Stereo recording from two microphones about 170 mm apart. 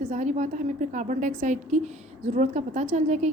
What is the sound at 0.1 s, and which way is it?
A woman's voice, 45° right (ahead or behind).